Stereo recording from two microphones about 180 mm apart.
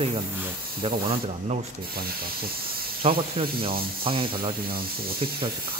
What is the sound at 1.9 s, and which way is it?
Speech, 55° right (ahead or behind).